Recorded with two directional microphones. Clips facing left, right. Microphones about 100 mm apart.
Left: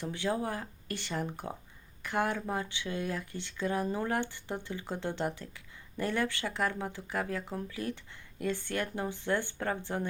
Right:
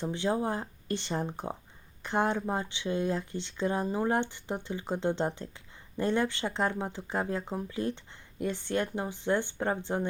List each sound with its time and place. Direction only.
0.0 s speech: 20° right (ahead or behind)